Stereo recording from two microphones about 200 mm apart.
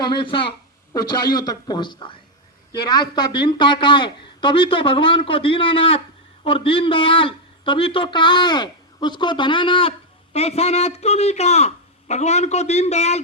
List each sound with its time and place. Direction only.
0.0 s a man's voice: 25° left (ahead or behind)